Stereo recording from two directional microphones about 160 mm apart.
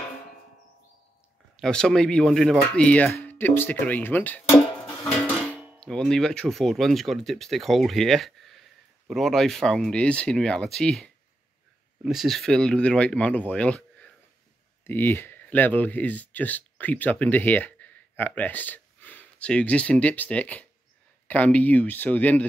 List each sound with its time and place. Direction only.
1.6 s speech: 5° left (ahead or behind)
5.0 s dishes: 15° left (ahead or behind)
5.8 s speech: 5° left (ahead or behind)